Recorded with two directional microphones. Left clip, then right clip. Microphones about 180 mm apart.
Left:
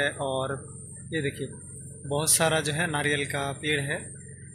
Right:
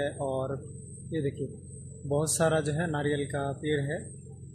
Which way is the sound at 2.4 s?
35° right (ahead or behind).